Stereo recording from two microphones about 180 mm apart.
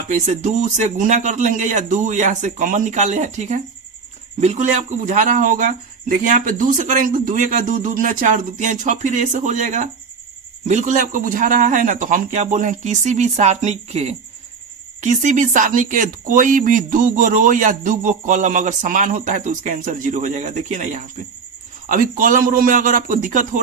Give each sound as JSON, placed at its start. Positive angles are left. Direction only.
{"t": 0.1, "sound": "speech", "side_deg": -40}